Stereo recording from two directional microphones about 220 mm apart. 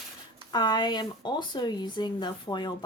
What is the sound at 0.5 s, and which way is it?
Speech, 20° left (ahead or behind).